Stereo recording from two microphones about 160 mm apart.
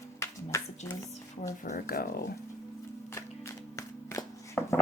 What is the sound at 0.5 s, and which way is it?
Music, 20° left (ahead or behind).